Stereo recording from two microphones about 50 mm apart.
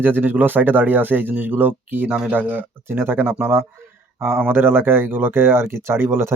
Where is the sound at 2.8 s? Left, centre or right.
Right.